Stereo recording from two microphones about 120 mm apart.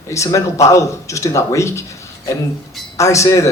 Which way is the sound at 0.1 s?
25° left (ahead or behind).